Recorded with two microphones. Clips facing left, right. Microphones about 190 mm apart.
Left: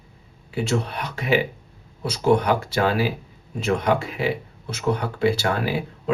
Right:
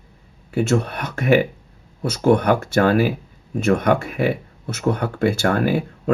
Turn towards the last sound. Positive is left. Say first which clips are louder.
# right 5 dB
turn(degrees=-50)  # may be behind; listen again after turning